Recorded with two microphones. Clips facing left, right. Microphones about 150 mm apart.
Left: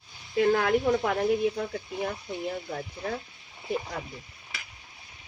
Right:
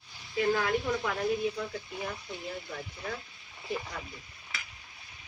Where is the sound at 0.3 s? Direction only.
60° left (ahead or behind).